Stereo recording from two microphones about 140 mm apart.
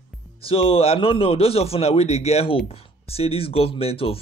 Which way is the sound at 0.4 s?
40° left (ahead or behind).